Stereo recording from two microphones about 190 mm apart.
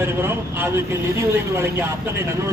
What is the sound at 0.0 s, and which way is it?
Speech, 10° right (ahead or behind).